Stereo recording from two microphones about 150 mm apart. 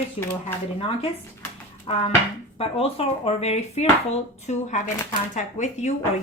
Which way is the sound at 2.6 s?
40° left (ahead or behind).